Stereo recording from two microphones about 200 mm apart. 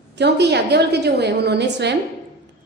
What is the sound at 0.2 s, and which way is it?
A woman's voice, 55° right (ahead or behind).